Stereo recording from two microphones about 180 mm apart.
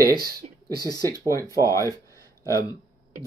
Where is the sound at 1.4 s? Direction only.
20° right (ahead or behind).